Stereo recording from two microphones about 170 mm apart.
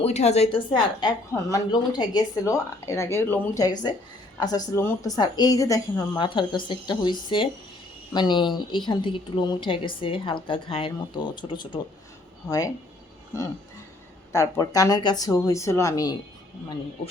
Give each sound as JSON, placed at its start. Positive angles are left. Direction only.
{"t": 0.0, "sound": "a woman's voice", "side_deg": 40}
{"t": 14.3, "sound": "a woman's voice", "side_deg": 20}
{"t": 17.0, "sound": "a man's voice", "side_deg": 35}